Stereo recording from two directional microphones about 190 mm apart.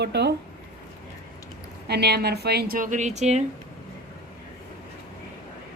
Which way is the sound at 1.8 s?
60° right (ahead or behind).